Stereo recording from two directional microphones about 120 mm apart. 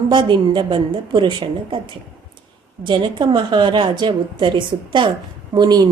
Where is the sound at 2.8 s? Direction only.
40° right (ahead or behind).